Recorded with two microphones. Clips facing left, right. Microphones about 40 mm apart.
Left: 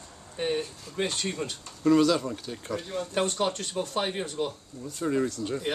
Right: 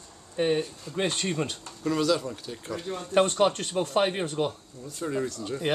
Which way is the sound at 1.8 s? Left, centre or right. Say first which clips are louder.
Left 4 dB; centre.